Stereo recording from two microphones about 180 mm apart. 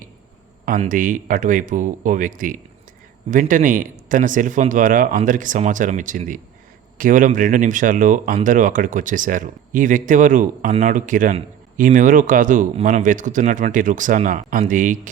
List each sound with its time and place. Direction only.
0.8 s speech: 50° right (ahead or behind)